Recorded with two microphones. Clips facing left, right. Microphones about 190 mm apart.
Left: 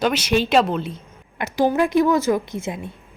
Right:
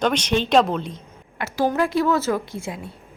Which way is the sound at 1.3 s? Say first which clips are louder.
Left 2 dB; 15° left (ahead or behind).